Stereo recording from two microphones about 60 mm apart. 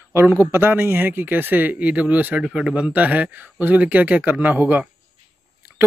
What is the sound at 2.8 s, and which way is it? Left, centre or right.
Speech, right.